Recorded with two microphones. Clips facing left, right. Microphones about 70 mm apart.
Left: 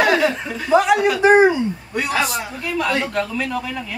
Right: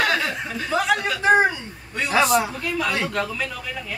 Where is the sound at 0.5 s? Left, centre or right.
Centre.